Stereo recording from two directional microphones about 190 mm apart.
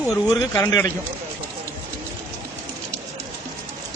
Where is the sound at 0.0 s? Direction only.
Centre (ahead or behind).